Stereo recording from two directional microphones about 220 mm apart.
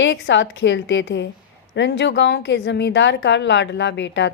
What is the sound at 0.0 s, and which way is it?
A woman's voice, 55° left (ahead or behind).